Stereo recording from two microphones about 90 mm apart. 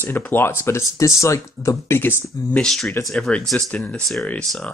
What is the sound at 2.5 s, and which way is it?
Speech, 5° left (ahead or behind).